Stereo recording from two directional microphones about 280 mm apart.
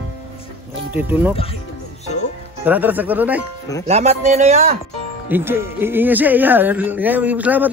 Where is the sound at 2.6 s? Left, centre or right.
Centre.